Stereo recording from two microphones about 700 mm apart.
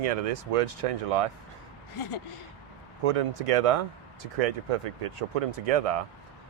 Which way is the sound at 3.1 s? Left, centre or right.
Right.